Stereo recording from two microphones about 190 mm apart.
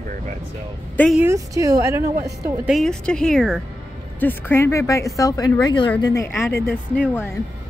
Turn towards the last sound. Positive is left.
turn(degrees=10)  # may be behind; listen again after turning